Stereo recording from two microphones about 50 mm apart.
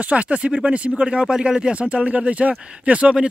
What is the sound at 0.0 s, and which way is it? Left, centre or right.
Speech, right.